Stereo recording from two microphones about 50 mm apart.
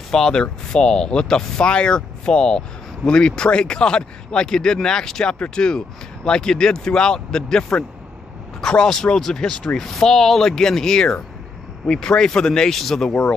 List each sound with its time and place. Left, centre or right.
0.1 s speech: centre